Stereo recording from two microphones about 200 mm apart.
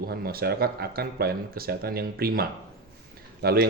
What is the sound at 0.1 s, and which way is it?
Speech, 50° right (ahead or behind).